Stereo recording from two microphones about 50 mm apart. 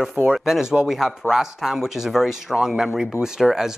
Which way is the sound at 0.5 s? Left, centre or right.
Centre.